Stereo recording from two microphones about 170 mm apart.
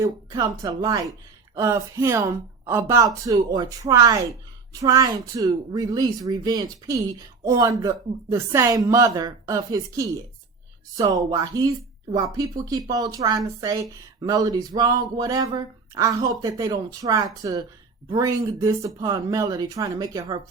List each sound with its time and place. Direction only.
0.0 s speech: 20° right (ahead or behind)